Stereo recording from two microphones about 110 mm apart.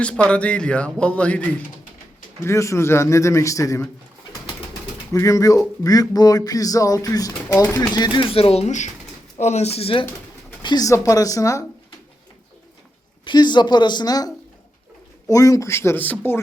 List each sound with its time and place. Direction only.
0.0 s a man's voice: 10° left (ahead or behind)
2.4 s a man's voice: 25° left (ahead or behind)
5.1 s speech: 30° left (ahead or behind)
8.3 s speech: 60° left (ahead or behind)
10.6 s pigeon: 45° left (ahead or behind)
10.8 s a man's voice: 30° left (ahead or behind)
13.2 s a man's voice: 40° left (ahead or behind); by 16.1 s 20° left (ahead or behind)